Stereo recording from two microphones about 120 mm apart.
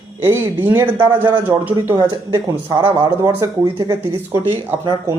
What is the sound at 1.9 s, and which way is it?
Speech, 30° right (ahead or behind).